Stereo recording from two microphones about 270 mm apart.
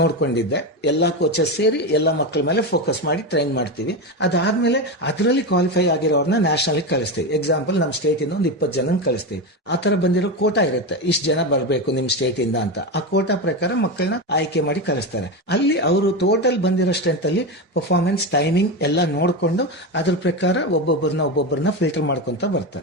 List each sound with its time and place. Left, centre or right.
0.0 s speech: left